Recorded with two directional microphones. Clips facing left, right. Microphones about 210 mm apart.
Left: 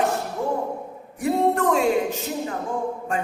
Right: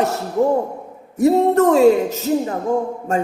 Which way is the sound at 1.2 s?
40° right (ahead or behind).